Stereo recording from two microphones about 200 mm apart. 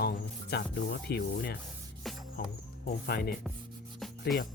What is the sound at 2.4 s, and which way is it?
Speech, 45° left (ahead or behind).